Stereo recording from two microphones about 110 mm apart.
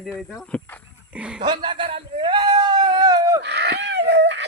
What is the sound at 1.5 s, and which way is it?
Speech, 45° right (ahead or behind).